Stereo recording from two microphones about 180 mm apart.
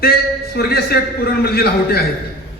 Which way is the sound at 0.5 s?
60° left (ahead or behind).